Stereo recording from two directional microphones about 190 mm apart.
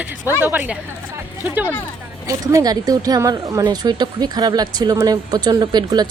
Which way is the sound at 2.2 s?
15° right (ahead or behind).